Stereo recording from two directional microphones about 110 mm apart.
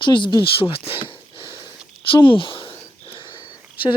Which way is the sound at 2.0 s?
50° left (ahead or behind).